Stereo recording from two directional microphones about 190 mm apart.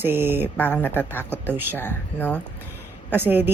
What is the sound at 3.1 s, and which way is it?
Speech, 10° right (ahead or behind).